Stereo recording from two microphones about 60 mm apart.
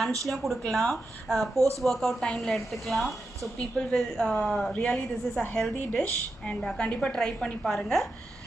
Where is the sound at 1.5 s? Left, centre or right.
Right.